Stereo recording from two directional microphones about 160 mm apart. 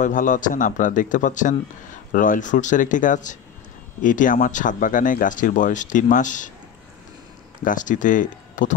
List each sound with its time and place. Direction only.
0.0 s a man's voice: 55° left (ahead or behind)
7.6 s speech: 55° left (ahead or behind)